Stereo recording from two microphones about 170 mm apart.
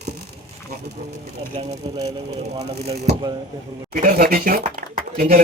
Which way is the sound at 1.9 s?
20° right (ahead or behind).